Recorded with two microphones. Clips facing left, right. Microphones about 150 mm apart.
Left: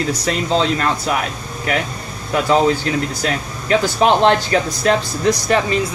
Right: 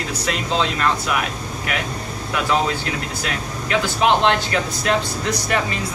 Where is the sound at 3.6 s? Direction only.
35° left (ahead or behind).